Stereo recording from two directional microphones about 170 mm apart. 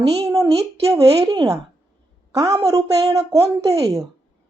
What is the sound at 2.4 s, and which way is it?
A woman's voice, 20° right (ahead or behind).